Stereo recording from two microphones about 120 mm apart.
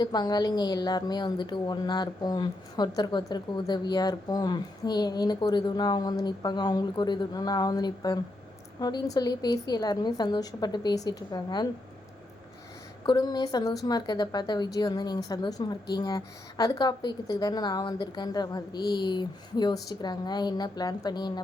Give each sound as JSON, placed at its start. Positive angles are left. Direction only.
{"t": 0.0, "sound": "a woman's voice", "side_deg": 35}
{"t": 13.1, "sound": "a woman's voice", "side_deg": 35}